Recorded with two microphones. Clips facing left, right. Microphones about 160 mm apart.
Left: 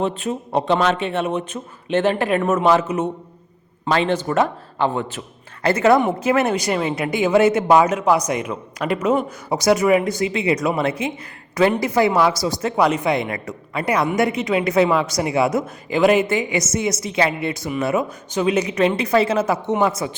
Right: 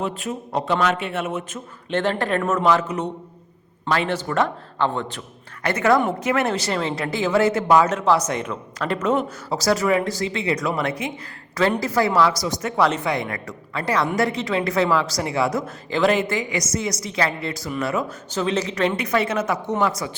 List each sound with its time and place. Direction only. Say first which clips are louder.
0.7 s speech: left 3 dB; 25° left (ahead or behind)
1.9 s speech: left 4 dB; 15° left (ahead or behind)
3.9 s speech: left 3 dB; 25° left (ahead or behind)
4.8 s speech: left 2 dB; 10° left (ahead or behind)
5.6 s speech: left 3 dB; 25° left (ahead or behind)
12.8 s speech: left 2 dB; 10° left (ahead or behind)
13.1 s speech: left 4 dB; 25° left (ahead or behind)